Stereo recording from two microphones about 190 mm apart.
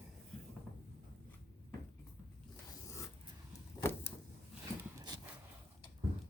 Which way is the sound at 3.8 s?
10° left (ahead or behind).